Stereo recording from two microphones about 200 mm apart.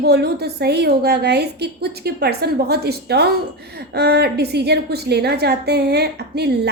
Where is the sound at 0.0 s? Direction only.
55° right (ahead or behind).